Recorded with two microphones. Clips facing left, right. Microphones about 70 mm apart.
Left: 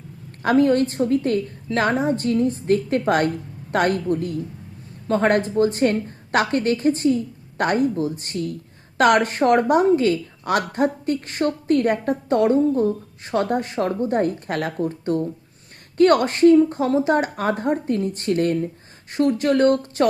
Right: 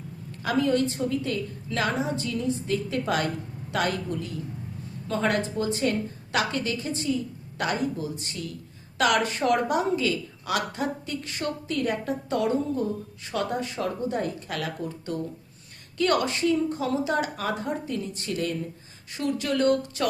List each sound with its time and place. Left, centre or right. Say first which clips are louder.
0.3 s a woman's voice: left 7 dB; left